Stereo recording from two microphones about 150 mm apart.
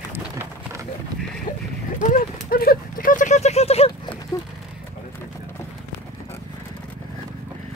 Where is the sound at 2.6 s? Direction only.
75° left (ahead or behind); by 3.9 s 45° left (ahead or behind).